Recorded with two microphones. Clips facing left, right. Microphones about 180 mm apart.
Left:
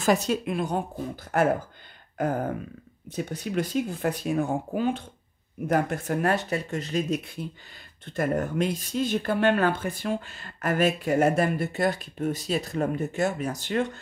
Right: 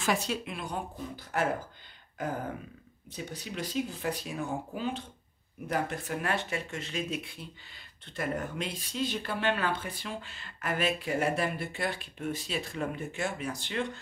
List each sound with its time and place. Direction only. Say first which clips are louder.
0.0 s speech: left 7 dB; 40° left (ahead or behind)